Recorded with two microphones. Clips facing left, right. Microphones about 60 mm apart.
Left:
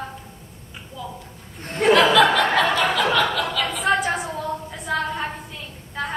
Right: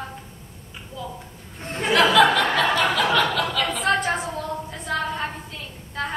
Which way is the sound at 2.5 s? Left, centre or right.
Centre.